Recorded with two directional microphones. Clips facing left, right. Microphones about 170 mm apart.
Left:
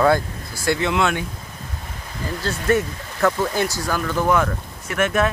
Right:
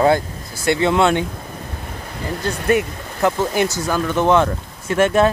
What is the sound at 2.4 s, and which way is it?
Speech, 15° right (ahead or behind).